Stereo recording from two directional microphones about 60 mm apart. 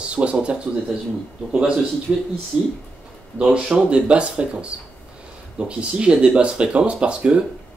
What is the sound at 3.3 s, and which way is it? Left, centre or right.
Speech, centre.